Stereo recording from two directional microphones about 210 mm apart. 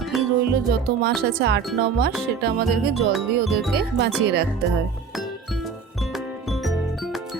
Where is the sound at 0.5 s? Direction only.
50° right (ahead or behind).